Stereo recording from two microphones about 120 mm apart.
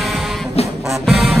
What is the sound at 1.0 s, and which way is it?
Music, centre (ahead or behind).